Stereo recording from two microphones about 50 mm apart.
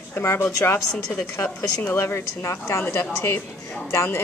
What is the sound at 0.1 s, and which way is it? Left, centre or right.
Speech, left.